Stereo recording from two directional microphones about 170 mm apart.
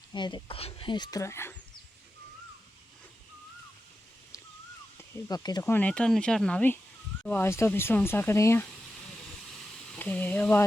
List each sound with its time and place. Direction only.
0.1 s speech: 25° left (ahead or behind)
4.9 s speech: 20° left (ahead or behind)
5.7 s speech: 5° left (ahead or behind)
9.9 s speech: 10° left (ahead or behind)